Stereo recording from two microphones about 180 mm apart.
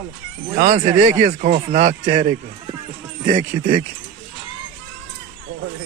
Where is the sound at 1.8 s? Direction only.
35° right (ahead or behind).